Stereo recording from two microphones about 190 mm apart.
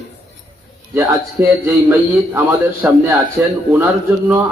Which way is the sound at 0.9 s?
15° right (ahead or behind).